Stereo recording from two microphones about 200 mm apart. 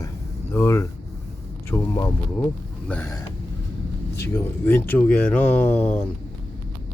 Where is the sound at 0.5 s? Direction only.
15° left (ahead or behind).